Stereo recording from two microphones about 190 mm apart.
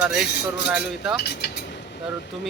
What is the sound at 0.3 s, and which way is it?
Speech, 60° left (ahead or behind).